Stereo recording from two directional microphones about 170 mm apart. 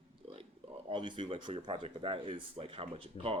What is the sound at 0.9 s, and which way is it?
Speech, 30° right (ahead or behind).